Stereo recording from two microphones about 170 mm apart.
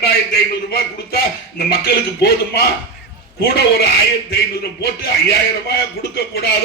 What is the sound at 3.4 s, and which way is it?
A man's voice, 70° left (ahead or behind).